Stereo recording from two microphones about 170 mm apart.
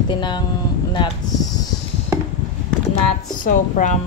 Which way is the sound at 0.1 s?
25° left (ahead or behind).